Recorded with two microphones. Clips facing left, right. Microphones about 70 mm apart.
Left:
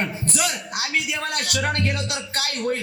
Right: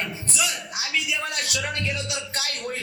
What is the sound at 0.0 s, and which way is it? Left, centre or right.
A man's voice, left.